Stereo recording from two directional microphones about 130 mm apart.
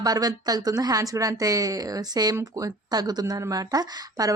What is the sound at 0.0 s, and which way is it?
Speech, 30° right (ahead or behind).